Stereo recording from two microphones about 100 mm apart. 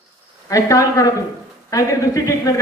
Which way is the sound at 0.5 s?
35° left (ahead or behind).